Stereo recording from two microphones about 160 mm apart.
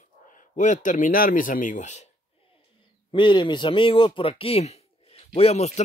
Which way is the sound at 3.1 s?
30° left (ahead or behind).